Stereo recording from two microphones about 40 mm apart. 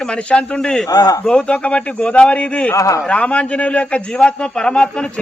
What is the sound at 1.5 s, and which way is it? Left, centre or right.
A man's voice, left.